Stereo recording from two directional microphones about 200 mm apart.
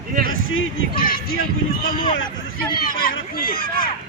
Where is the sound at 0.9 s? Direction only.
50° left (ahead or behind).